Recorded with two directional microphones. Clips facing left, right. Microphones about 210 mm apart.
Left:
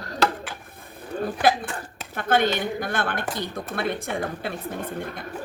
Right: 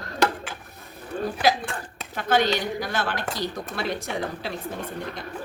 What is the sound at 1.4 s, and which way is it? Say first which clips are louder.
Speech: left 1 dB; 55° left (ahead or behind).